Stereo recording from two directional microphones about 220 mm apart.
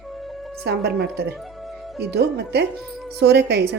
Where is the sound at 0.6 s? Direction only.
50° right (ahead or behind).